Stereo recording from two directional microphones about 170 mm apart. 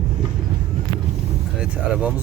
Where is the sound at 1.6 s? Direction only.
5° right (ahead or behind).